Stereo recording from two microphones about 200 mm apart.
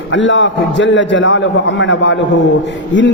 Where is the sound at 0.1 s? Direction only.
70° left (ahead or behind).